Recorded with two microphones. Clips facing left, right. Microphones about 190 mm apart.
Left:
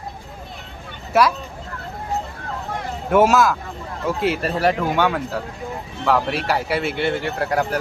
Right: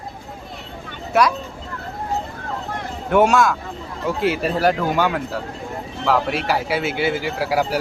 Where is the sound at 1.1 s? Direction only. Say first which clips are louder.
Even; centre (ahead or behind).